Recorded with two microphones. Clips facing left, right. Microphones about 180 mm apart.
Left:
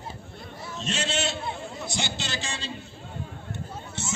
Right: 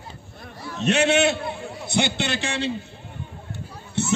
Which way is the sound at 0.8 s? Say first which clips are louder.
Right 11 dB; 60° right (ahead or behind).